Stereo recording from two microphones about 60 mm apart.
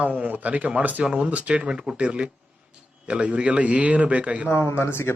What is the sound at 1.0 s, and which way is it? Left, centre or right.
A man's voice, centre.